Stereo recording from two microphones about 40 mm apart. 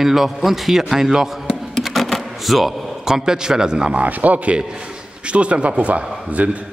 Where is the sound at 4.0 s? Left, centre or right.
Right.